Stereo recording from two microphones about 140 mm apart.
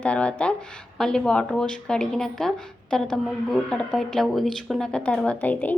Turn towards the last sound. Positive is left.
turn(degrees=10)  # may be behind; listen again after turning